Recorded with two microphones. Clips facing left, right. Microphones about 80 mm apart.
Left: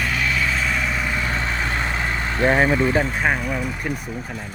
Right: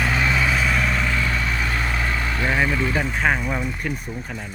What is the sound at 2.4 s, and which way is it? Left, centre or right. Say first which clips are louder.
Speech: left 6 dB; left.